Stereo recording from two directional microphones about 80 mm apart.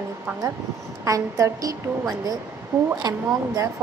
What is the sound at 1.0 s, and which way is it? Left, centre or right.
A woman's voice, right.